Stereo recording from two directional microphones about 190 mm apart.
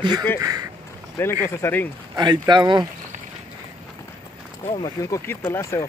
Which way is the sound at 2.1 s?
20° right (ahead or behind).